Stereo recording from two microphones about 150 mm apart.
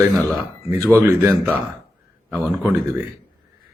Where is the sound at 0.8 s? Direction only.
20° right (ahead or behind).